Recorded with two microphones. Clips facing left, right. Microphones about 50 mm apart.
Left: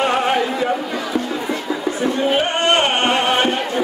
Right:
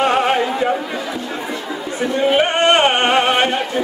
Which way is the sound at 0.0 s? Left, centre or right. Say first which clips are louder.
Right 2 dB; centre.